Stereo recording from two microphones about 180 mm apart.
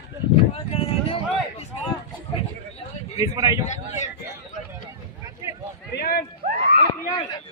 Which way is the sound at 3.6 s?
40° left (ahead or behind).